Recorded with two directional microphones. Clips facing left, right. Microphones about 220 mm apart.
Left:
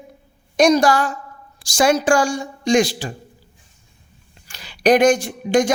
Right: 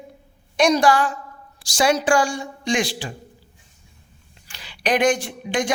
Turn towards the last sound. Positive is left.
turn(degrees=40)  # may be behind; listen again after turning